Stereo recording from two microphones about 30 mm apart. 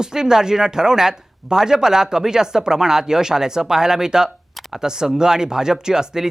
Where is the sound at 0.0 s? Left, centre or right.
Right.